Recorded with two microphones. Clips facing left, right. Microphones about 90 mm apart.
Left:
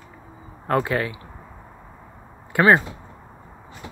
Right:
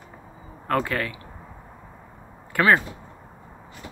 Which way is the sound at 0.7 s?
20° left (ahead or behind).